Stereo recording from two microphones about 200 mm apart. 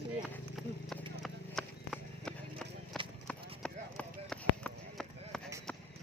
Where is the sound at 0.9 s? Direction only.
Centre (ahead or behind).